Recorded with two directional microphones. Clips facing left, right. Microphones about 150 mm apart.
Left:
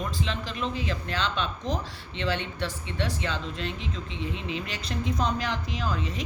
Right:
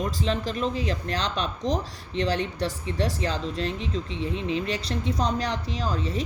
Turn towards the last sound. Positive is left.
turn(degrees=-35)  # may be behind; listen again after turning